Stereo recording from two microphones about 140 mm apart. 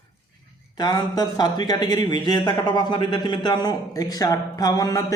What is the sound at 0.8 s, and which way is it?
Speech, 30° left (ahead or behind).